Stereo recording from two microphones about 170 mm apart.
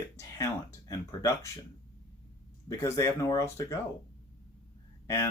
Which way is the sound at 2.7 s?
15° left (ahead or behind).